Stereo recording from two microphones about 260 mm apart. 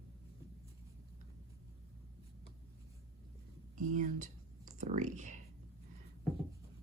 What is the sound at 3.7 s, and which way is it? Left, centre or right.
Speech, right.